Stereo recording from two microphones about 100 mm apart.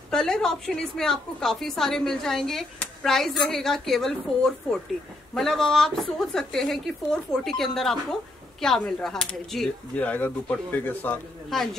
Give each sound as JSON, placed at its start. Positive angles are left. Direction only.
{"t": 0.1, "sound": "a woman's voice", "side_deg": 5}
{"t": 9.9, "sound": "speech", "side_deg": 15}